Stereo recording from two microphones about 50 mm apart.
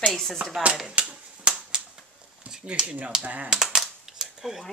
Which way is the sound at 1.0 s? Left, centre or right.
Right.